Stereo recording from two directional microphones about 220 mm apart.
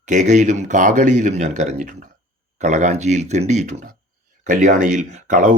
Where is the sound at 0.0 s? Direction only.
35° right (ahead or behind).